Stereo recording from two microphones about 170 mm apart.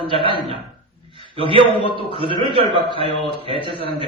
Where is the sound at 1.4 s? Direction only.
30° right (ahead or behind).